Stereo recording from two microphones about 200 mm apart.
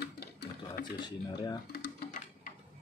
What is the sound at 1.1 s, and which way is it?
Speech, 20° left (ahead or behind).